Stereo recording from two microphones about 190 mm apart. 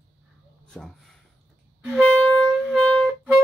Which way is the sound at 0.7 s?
5° left (ahead or behind).